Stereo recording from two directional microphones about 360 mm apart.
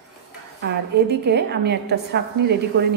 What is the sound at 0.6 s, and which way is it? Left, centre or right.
A woman's voice, right.